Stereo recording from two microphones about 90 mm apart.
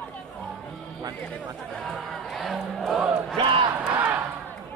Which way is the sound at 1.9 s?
Centre (ahead or behind).